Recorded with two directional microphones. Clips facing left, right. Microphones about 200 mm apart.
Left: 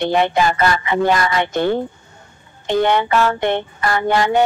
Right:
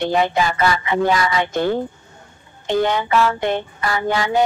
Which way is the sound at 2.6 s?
60° left (ahead or behind).